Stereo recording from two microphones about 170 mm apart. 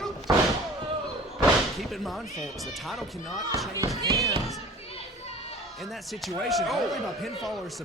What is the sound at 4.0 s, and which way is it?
Speech, 20° right (ahead or behind).